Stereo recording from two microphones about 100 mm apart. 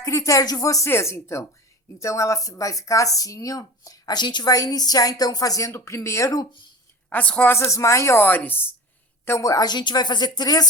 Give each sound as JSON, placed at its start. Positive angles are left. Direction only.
{"t": 0.0, "sound": "speech", "side_deg": 30}
{"t": 0.9, "sound": "speech", "side_deg": 25}
{"t": 7.1, "sound": "a woman's voice", "side_deg": 15}
{"t": 7.5, "sound": "speech", "side_deg": 30}